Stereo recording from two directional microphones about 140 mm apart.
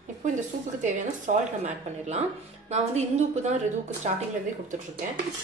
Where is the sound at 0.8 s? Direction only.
60° right (ahead or behind).